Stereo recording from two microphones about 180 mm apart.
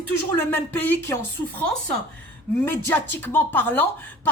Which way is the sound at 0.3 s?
10° left (ahead or behind).